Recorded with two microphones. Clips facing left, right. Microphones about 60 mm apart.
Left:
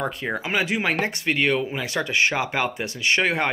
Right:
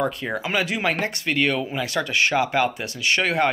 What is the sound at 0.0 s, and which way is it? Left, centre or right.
Speech, left.